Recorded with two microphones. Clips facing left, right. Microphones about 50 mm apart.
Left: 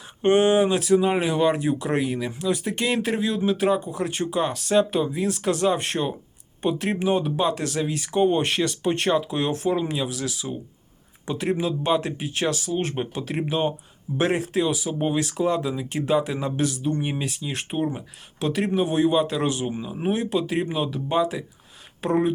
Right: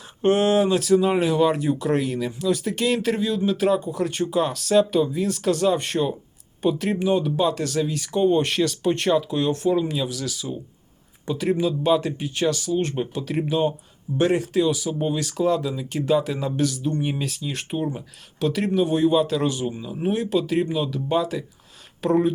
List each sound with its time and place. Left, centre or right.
0.2 s speech: centre
6.9 s speech: left
7.3 s speech: centre
12.9 s speech: left
17.5 s speech: left; by 19.4 s centre
19.4 s speech: left
20.1 s speech: centre
20.7 s speech: left
21.1 s speech: centre